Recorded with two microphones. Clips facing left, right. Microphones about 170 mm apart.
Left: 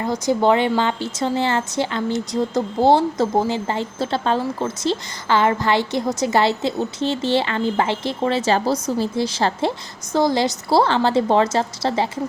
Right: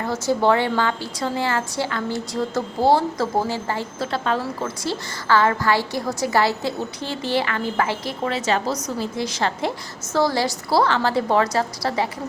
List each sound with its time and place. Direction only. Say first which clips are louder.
0.0 s a woman's voice: left 2 dB; 20° left (ahead or behind)
10.1 s a woman's voice: left 2 dB; 20° left (ahead or behind)